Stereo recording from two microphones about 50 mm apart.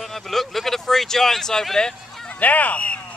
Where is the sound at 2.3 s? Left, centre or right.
Left.